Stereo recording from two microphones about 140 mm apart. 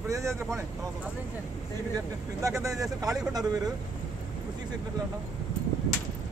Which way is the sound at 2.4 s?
20° right (ahead or behind).